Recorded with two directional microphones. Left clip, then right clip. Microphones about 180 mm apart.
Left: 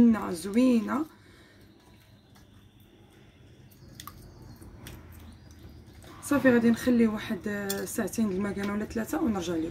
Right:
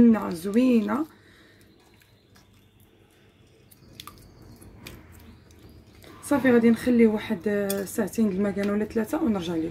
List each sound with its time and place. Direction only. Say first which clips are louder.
0.0 s speech: right 4 dB; 35° right (ahead or behind)
6.2 s speech: right 3 dB; 35° right (ahead or behind)